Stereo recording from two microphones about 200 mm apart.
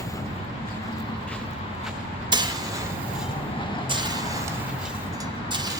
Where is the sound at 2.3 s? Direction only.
20° right (ahead or behind).